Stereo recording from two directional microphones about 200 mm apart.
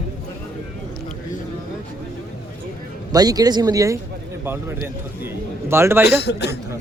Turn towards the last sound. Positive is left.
turn(degrees=55)  # may be behind; listen again after turning